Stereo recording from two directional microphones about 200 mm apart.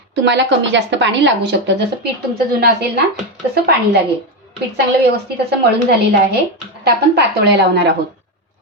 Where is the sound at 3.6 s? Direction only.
55° right (ahead or behind).